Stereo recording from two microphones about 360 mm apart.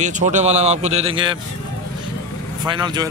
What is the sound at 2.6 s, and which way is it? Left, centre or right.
Speech, centre.